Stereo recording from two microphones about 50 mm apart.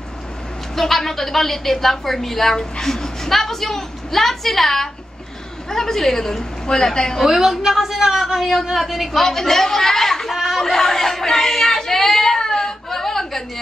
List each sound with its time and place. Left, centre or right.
0.7 s a woman's voice: centre
7.2 s a woman's voice: centre
10.3 s chatter: centre
10.6 s a sound: centre